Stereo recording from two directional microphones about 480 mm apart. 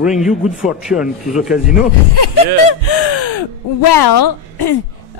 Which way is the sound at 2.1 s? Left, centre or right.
Left.